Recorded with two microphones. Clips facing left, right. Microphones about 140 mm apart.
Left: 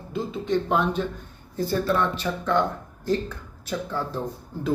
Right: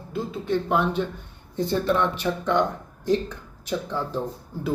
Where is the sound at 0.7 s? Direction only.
15° right (ahead or behind).